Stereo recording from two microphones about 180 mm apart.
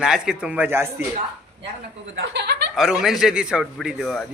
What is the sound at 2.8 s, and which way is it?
A man's voice, 5° right (ahead or behind).